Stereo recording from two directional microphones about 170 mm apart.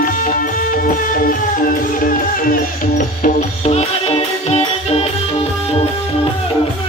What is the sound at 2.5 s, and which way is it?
Music, 50° left (ahead or behind).